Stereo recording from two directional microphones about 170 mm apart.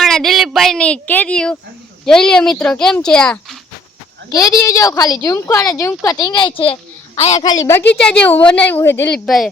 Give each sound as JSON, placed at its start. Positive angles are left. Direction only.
{"t": 0.0, "sound": "a sound", "side_deg": 0}
{"t": 2.0, "sound": "speech", "side_deg": 5}
{"t": 4.3, "sound": "a woman's voice", "side_deg": 20}
{"t": 7.4, "sound": "a woman's voice", "side_deg": 20}